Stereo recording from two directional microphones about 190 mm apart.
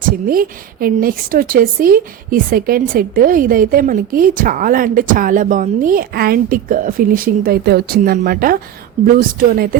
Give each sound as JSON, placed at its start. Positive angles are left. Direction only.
{"t": 0.3, "sound": "a woman's voice", "side_deg": -50}